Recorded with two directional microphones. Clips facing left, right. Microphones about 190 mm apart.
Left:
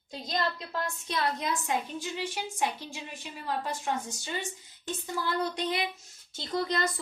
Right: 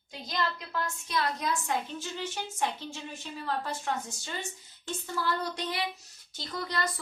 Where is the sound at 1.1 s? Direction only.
25° left (ahead or behind).